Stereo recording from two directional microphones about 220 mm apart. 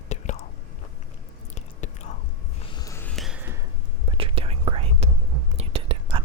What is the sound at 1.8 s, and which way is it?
Whispering, 30° left (ahead or behind).